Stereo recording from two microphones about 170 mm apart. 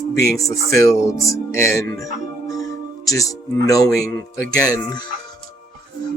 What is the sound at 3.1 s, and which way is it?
Speech, 20° left (ahead or behind).